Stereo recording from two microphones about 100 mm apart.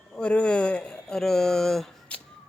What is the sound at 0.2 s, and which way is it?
A man's voice, 10° left (ahead or behind).